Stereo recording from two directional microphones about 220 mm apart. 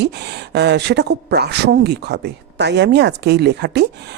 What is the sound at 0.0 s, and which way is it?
Speech, 50° right (ahead or behind).